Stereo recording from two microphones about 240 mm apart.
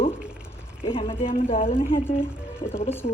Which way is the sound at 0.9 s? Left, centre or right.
Left.